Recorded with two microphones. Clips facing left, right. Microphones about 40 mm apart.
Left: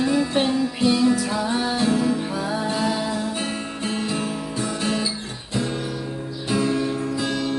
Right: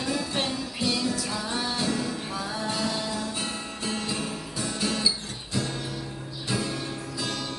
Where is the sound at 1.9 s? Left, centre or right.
Left.